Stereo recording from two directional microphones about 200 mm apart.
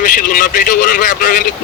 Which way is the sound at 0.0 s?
40° left (ahead or behind).